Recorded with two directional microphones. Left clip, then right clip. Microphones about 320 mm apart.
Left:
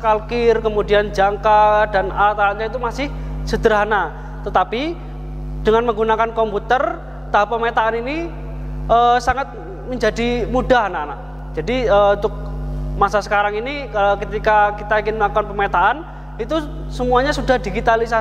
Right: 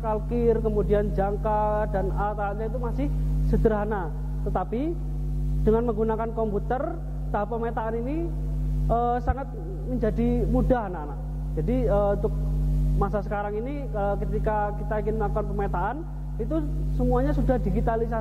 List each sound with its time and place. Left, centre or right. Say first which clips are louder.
0.0 s speech: left 10 dB; centre